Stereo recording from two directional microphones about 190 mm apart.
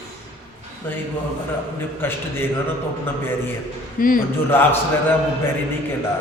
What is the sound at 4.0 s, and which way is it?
Speech, 45° left (ahead or behind).